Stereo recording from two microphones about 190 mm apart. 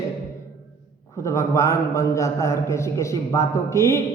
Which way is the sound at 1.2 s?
15° left (ahead or behind).